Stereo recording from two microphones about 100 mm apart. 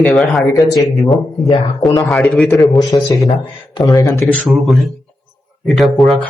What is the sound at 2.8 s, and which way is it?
Speech, 45° left (ahead or behind).